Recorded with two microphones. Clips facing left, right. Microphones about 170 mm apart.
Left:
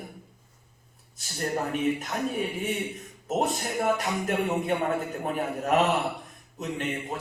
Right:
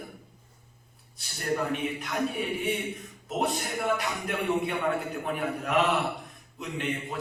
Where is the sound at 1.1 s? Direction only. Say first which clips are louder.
Even; 45° left (ahead or behind).